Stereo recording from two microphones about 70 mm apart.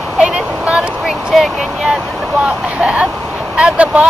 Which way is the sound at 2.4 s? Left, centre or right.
Centre.